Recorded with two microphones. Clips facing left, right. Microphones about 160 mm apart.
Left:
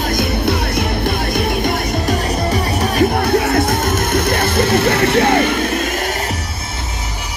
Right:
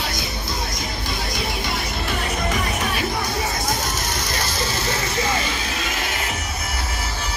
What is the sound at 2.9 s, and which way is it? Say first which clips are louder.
Music: left 11 dB; 60° left (ahead or behind).